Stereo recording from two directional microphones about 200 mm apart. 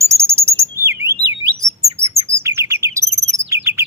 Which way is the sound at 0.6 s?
15° right (ahead or behind).